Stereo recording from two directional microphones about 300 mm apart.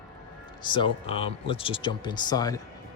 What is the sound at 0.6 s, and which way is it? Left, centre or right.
Speech, centre.